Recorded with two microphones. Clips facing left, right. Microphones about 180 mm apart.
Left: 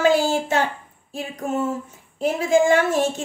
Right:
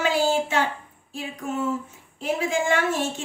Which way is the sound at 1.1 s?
45° left (ahead or behind).